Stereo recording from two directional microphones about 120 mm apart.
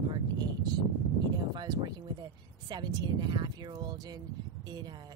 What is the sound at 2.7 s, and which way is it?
A woman's voice, 35° right (ahead or behind).